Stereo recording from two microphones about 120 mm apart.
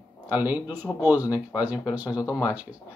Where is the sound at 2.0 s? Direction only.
30° left (ahead or behind).